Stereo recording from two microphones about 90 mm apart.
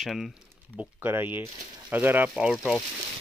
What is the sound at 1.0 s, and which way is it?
Speech, 25° right (ahead or behind).